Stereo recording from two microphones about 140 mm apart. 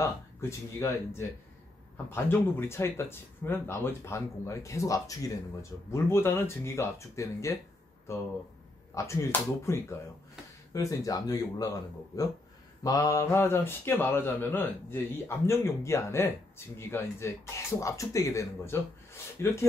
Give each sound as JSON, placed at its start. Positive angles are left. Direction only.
{"t": 0.0, "sound": "speech", "side_deg": 20}
{"t": 8.9, "sound": "speech", "side_deg": 20}